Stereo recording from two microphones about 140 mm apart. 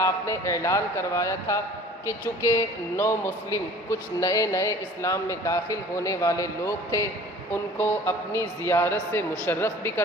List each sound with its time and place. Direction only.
0.0 s a man's voice: 20° left (ahead or behind)